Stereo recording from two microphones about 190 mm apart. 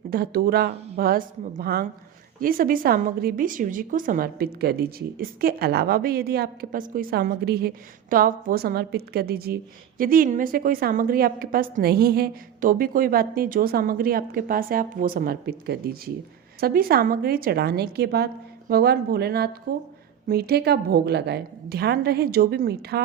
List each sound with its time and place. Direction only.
0.1 s a woman's voice: 55° right (ahead or behind)